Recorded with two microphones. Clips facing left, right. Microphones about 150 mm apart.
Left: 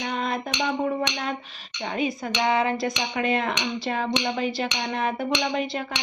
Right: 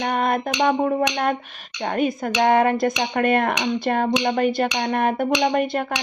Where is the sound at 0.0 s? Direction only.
55° right (ahead or behind).